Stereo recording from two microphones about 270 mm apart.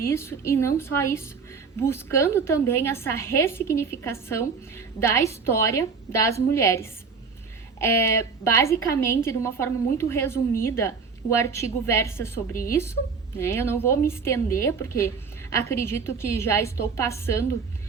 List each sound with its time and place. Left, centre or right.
0.0 s a woman's voice: centre